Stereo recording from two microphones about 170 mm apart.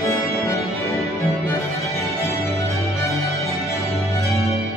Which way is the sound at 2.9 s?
15° left (ahead or behind).